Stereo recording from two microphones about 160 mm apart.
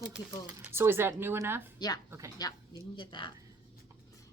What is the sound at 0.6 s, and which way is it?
Speech, 15° right (ahead or behind).